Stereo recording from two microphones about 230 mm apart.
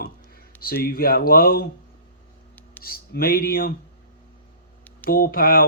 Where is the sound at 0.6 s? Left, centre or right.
Left.